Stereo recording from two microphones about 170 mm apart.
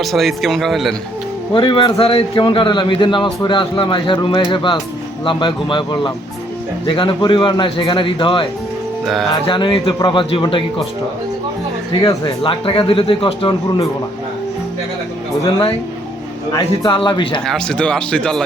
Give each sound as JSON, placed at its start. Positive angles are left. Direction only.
{"t": 0.0, "sound": "speech", "side_deg": 0}
{"t": 1.5, "sound": "a man's voice", "side_deg": 30}
{"t": 12.0, "sound": "speech", "side_deg": 30}
{"t": 16.5, "sound": "a man's voice", "side_deg": 25}
{"t": 17.4, "sound": "speech", "side_deg": 5}